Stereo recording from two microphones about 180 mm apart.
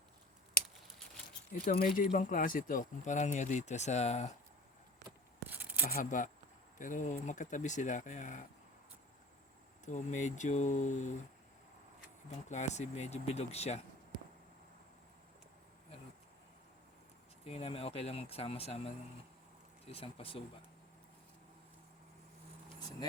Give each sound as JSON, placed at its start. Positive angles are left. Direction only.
{"t": 1.8, "sound": "speech", "side_deg": 50}
{"t": 5.5, "sound": "a sound", "side_deg": -10}
{"t": 5.8, "sound": "speech", "side_deg": 45}
{"t": 9.8, "sound": "speech", "side_deg": 40}
{"t": 12.5, "sound": "speech", "side_deg": 40}
{"t": 17.4, "sound": "speech", "side_deg": 35}
{"t": 22.8, "sound": "speech", "side_deg": 25}